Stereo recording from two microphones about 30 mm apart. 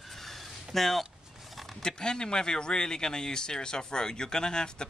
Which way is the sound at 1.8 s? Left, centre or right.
Left.